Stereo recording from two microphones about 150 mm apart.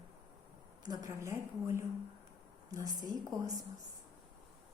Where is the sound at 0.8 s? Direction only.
25° right (ahead or behind).